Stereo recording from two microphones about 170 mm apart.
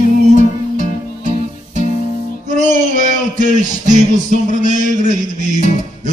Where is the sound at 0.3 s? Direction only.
45° right (ahead or behind).